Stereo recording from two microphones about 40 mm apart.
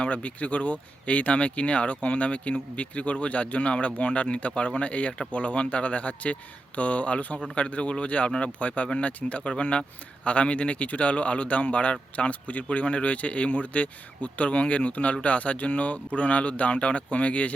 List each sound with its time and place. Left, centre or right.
0.0 s a man's voice: left